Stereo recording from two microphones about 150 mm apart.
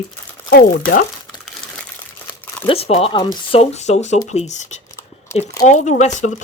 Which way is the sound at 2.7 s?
45° left (ahead or behind).